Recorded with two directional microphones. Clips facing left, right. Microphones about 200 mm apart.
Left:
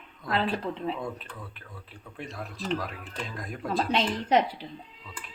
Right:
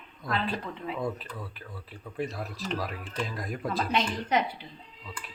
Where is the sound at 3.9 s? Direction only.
30° left (ahead or behind).